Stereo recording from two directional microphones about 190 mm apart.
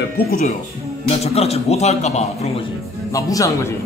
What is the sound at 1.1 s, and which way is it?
A man's voice, 30° left (ahead or behind).